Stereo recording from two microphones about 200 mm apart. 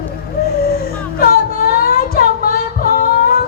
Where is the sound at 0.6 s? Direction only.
45° left (ahead or behind).